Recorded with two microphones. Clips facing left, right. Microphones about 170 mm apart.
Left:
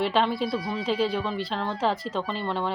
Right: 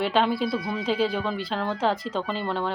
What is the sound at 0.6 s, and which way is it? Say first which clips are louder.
Speech: right 1 dB; 35° left (ahead or behind).